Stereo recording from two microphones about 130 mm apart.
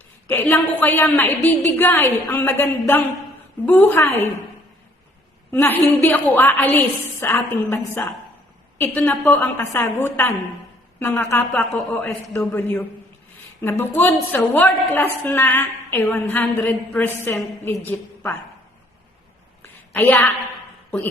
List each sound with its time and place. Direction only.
0.3 s a woman's voice: 15° left (ahead or behind)
5.5 s a woman's voice: 15° left (ahead or behind)
19.6 s a sound: 15° left (ahead or behind)